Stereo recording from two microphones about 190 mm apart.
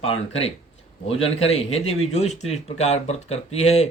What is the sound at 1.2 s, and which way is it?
Speech, 30° left (ahead or behind).